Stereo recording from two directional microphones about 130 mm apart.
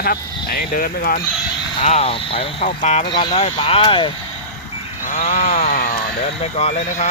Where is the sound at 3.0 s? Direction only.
35° left (ahead or behind).